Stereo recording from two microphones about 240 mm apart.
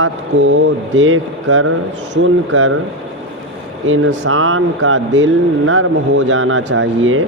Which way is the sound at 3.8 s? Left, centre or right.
Right.